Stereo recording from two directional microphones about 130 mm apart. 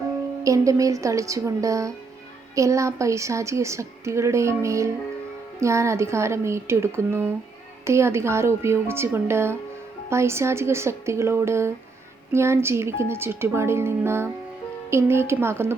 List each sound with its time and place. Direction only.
0.4 s a woman's voice: 25° right (ahead or behind)